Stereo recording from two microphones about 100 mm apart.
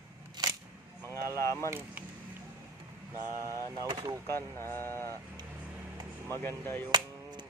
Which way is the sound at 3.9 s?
50° right (ahead or behind).